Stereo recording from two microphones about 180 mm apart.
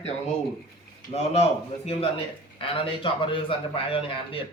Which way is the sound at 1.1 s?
35° left (ahead or behind).